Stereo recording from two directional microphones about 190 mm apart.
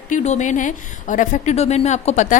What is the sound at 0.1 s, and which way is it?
A woman's voice, 40° left (ahead or behind).